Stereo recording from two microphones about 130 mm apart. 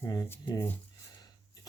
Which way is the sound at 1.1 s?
30° left (ahead or behind).